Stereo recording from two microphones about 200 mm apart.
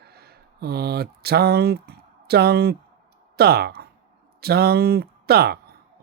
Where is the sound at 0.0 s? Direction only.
50° right (ahead or behind).